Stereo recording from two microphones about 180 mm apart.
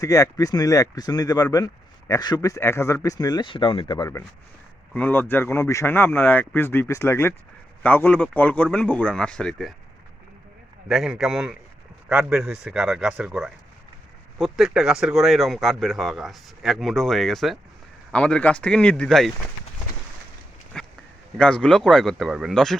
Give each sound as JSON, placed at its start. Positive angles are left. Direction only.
{"t": 0.0, "sound": "speech", "side_deg": 20}
{"t": 4.9, "sound": "speech", "side_deg": 10}
{"t": 10.8, "sound": "speech", "side_deg": 0}
{"t": 20.7, "sound": "a sound", "side_deg": 5}
{"t": 21.3, "sound": "speech", "side_deg": 5}